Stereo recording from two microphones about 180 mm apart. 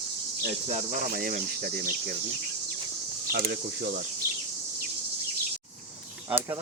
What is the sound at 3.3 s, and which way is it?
Speech, 60° right (ahead or behind).